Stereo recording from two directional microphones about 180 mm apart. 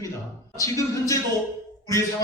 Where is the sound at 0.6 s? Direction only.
15° left (ahead or behind).